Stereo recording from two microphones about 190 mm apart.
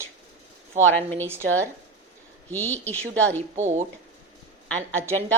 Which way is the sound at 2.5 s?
10° left (ahead or behind).